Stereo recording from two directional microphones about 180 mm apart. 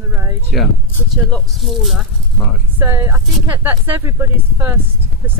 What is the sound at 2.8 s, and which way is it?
Speech, 15° right (ahead or behind).